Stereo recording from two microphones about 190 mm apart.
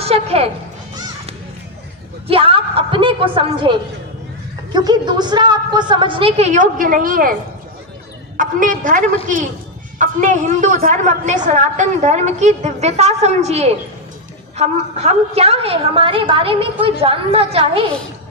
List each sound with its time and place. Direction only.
0.0 s speech: 30° right (ahead or behind)
2.2 s a woman's voice: 30° right (ahead or behind); by 7.3 s 50° right (ahead or behind)
8.4 s a woman's voice: 45° right (ahead or behind)